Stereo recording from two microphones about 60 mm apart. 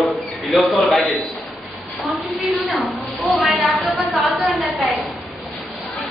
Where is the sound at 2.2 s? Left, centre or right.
Centre.